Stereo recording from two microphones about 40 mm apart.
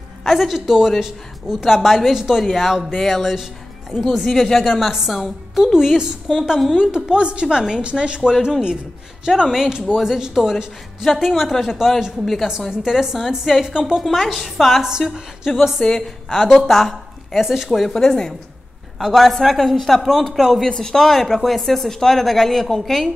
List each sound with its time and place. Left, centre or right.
0.2 s a woman's voice: centre
14.8 s a woman's voice: centre
15.5 s a woman's voice: centre
18.9 s a woman's voice: centre
20.6 s a woman's voice: centre